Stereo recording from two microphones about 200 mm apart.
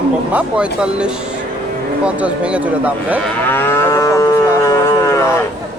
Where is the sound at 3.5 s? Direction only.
10° left (ahead or behind).